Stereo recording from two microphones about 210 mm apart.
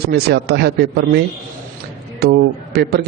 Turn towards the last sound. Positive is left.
turn(degrees=-50)  # may be behind; listen again after turning